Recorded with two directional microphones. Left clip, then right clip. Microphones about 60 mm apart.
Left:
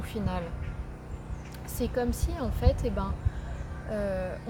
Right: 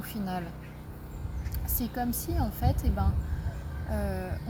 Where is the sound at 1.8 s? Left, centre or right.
Left.